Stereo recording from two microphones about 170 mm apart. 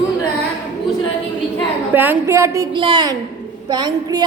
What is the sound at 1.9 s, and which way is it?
A woman's voice, 10° right (ahead or behind).